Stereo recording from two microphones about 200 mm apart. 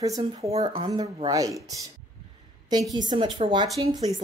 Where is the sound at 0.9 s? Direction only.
20° right (ahead or behind).